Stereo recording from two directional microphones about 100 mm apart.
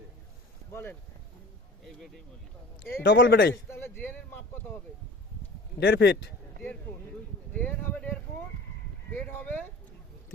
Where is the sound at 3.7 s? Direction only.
20° left (ahead or behind).